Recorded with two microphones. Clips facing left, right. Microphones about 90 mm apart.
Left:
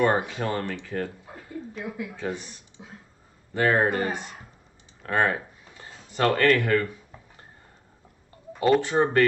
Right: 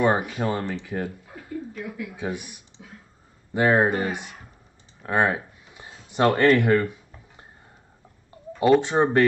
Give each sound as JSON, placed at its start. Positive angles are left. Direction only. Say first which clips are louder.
{"t": 0.0, "sound": "speech", "louder": "right 1 dB", "side_deg": -15}
{"t": 1.2, "sound": "a sound", "louder": "right 3 dB", "side_deg": 25}
{"t": 2.1, "sound": "speech", "louder": "right 1 dB", "side_deg": -15}
{"t": 8.8, "sound": "speech", "louder": "right 2 dB", "side_deg": -20}